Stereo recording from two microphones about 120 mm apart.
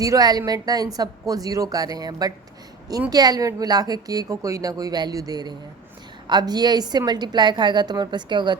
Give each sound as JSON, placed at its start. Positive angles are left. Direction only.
{"t": 0.0, "sound": "a woman's voice", "side_deg": -30}